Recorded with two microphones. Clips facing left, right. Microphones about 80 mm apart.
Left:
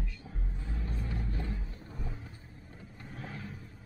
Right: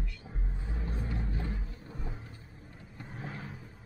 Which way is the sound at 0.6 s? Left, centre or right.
Centre.